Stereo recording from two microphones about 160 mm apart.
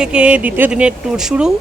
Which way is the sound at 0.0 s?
5° right (ahead or behind).